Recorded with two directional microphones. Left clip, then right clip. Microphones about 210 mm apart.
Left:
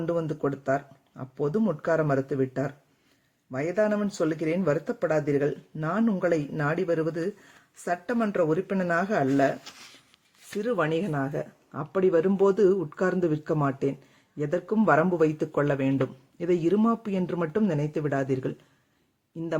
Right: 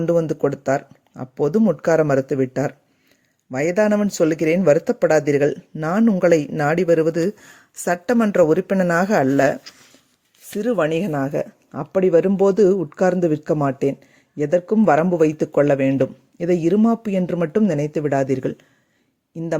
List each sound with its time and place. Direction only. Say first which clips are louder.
0.0 s speech: right 9 dB; 35° right (ahead or behind)
10.5 s speech: right 7 dB; 25° right (ahead or behind)